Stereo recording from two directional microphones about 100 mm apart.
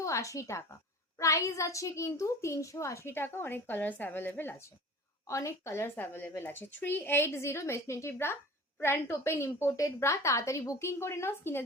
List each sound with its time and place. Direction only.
0.0 s a woman's voice: 30° left (ahead or behind)
5.2 s a woman's voice: 30° left (ahead or behind)